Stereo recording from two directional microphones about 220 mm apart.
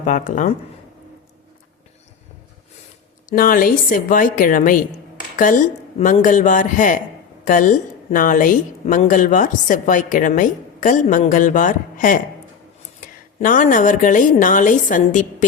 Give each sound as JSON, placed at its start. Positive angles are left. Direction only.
{"t": 0.0, "sound": "a woman's voice", "side_deg": 35}
{"t": 3.2, "sound": "a woman's voice", "side_deg": 40}